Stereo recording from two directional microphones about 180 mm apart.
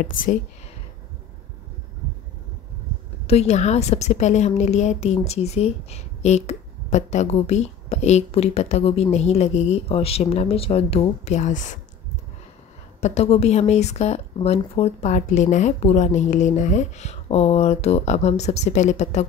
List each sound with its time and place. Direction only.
3.3 s a woman's voice: 35° left (ahead or behind)
13.0 s a woman's voice: 35° left (ahead or behind)